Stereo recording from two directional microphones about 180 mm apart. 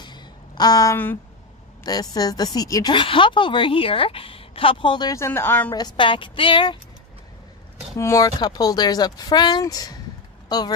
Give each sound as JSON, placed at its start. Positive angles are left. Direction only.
{"t": 0.0, "sound": "a sound", "side_deg": 25}
{"t": 1.9, "sound": "speech", "side_deg": 20}
{"t": 5.7, "sound": "speech", "side_deg": 25}
{"t": 8.0, "sound": "speech", "side_deg": 20}